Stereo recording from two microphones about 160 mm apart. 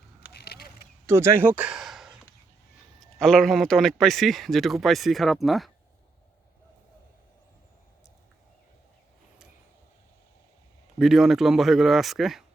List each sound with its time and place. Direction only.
0.3 s a sound: 85° left
1.0 s a man's voice: 15° right (ahead or behind); by 5.7 s centre (ahead or behind)
10.9 s a man's voice: centre (ahead or behind)